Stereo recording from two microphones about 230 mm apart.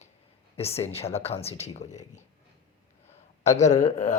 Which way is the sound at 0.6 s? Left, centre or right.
Left.